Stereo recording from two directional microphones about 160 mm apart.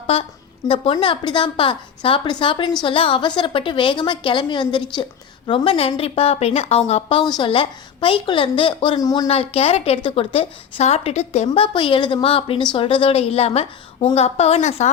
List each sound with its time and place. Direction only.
0.1 s speech: 35° left (ahead or behind)
9.2 s speech: 35° left (ahead or behind)
11.4 s speech: 30° left (ahead or behind)